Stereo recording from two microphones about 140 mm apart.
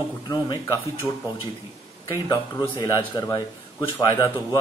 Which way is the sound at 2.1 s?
30° left (ahead or behind).